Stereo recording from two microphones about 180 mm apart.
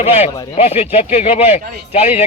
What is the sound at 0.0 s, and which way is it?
A man's voice, 35° left (ahead or behind).